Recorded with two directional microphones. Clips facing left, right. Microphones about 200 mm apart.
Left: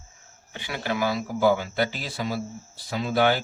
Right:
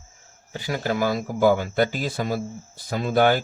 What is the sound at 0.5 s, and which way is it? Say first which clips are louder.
Speech: right 4 dB; 40° right (ahead or behind).